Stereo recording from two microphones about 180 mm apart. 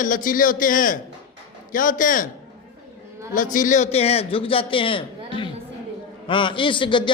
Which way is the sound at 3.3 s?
45° left (ahead or behind).